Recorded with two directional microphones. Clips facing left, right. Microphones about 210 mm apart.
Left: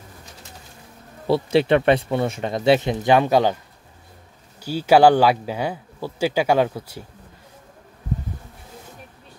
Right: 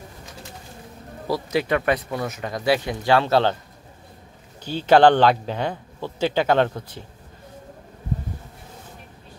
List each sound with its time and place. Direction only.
1.2 s speech: 25° left (ahead or behind)
4.6 s speech: 10° left (ahead or behind)